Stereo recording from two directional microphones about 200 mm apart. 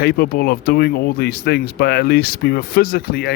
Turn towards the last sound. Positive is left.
turn(degrees=50)  # may be behind; listen again after turning